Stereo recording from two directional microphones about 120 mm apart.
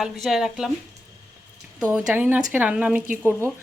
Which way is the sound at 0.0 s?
5° right (ahead or behind).